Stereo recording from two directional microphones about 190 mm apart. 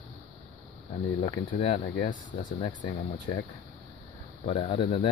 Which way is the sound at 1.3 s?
30° left (ahead or behind).